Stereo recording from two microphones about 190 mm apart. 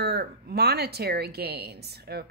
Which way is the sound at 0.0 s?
55° right (ahead or behind).